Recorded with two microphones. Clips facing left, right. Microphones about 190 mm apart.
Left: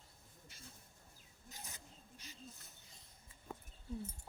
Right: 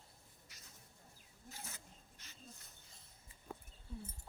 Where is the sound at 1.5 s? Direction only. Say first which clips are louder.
Even; 15° left (ahead or behind).